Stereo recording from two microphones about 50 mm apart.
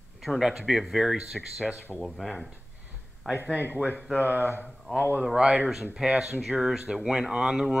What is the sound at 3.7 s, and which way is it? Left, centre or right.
Speech, right.